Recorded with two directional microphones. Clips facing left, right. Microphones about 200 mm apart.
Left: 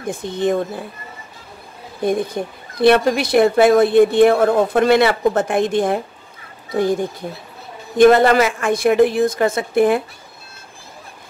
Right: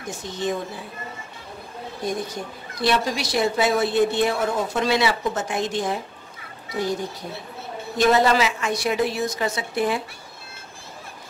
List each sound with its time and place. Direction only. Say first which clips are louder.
0.0 s a woman's voice: left 7 dB; 55° left (ahead or behind)
2.0 s a woman's voice: left 9 dB; 55° left (ahead or behind)